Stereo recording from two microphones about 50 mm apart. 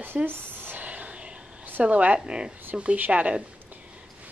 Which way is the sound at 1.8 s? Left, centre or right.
Right.